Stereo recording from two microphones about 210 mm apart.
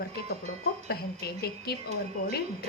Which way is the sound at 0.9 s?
50° left (ahead or behind).